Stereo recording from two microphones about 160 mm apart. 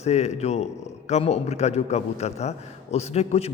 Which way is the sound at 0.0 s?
45° left (ahead or behind).